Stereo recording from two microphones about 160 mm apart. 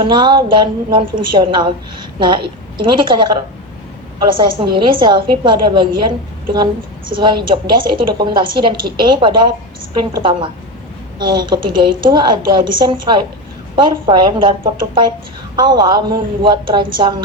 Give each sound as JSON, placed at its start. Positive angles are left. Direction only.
{"t": 0.0, "sound": "a woman's voice", "side_deg": -30}
{"t": 4.4, "sound": "a woman's voice", "side_deg": -30}
{"t": 11.2, "sound": "a woman's voice", "side_deg": -30}